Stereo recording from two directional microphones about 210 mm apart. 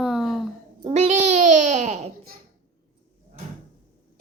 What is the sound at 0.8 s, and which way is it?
A child's voice, 35° right (ahead or behind).